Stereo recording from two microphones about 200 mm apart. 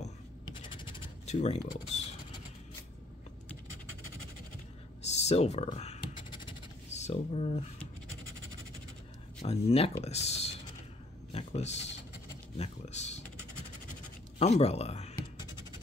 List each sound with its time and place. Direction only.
0.5 s scratch: 25° left (ahead or behind)
1.3 s speech: 35° left (ahead or behind)
5.0 s scratch: 35° left (ahead or behind)
9.4 s speech: 30° left (ahead or behind)
14.4 s speech: 30° left (ahead or behind)